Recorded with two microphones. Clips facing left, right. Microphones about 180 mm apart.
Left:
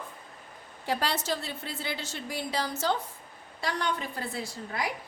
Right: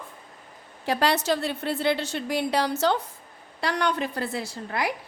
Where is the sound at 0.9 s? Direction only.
70° right (ahead or behind).